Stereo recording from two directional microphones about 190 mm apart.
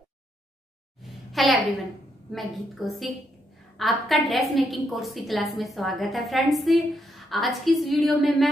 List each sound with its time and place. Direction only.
1.3 s a woman's voice: centre (ahead or behind)